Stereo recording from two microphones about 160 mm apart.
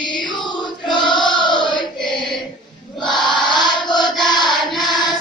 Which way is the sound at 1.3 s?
30° left (ahead or behind).